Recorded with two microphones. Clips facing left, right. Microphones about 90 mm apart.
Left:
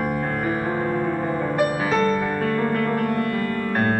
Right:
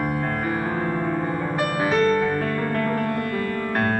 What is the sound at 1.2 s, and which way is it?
Music, 15° left (ahead or behind).